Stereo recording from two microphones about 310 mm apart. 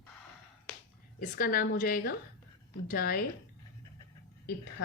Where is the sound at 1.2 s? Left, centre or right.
Left.